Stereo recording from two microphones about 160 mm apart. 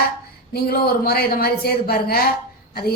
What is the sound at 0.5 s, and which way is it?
A woman's voice, 75° left (ahead or behind).